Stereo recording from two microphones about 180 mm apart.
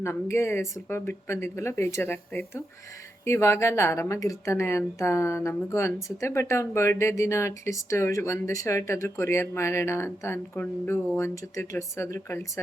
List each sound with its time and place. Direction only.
0.0 s a woman's voice: 15° left (ahead or behind)